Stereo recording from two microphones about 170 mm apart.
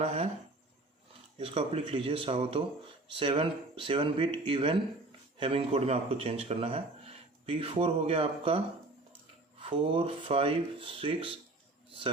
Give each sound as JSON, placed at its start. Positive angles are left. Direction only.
{"t": 0.0, "sound": "speech", "side_deg": -35}
{"t": 1.4, "sound": "speech", "side_deg": -35}
{"t": 9.6, "sound": "speech", "side_deg": -30}